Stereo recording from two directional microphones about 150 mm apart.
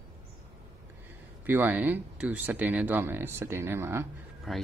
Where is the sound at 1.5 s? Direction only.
10° right (ahead or behind).